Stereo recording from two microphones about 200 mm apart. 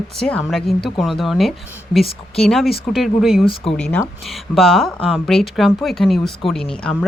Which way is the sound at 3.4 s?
25° left (ahead or behind).